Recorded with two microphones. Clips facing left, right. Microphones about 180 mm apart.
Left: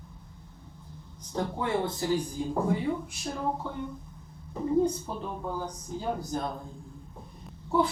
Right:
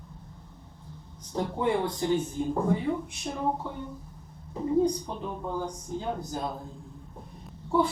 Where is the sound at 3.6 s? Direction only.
5° right (ahead or behind).